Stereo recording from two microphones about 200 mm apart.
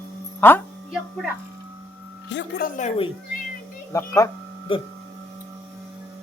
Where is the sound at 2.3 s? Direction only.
65° left (ahead or behind).